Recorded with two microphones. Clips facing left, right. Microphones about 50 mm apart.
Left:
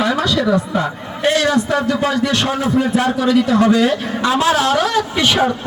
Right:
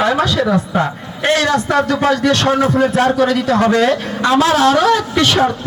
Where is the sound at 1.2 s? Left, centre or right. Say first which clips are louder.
Right 1 dB; right.